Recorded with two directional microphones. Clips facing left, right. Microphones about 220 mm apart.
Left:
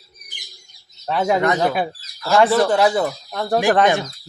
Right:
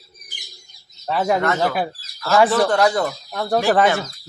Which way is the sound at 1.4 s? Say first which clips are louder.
Left 2 dB; 15° left (ahead or behind).